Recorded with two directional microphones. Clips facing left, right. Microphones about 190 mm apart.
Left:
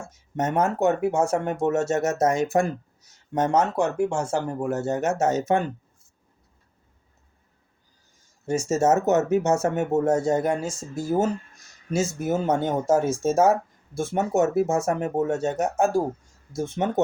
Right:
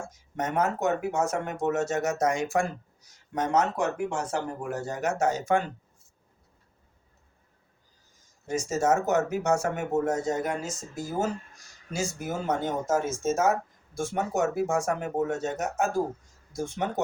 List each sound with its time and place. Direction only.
0.1 s speech: 25° left (ahead or behind)
8.4 s speech: 25° left (ahead or behind)